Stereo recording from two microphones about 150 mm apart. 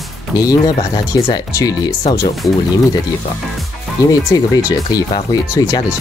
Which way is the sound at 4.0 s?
20° left (ahead or behind).